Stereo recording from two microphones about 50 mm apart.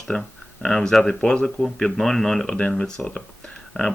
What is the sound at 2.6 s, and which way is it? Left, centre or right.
Speech, left.